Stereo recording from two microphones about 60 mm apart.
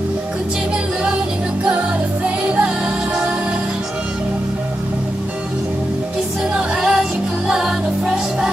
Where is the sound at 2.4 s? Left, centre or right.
Centre.